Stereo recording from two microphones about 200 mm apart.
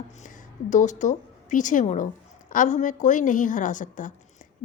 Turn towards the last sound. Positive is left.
turn(degrees=40)  # may be behind; listen again after turning